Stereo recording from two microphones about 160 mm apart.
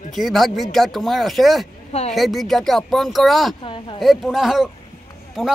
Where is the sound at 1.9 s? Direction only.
40° left (ahead or behind).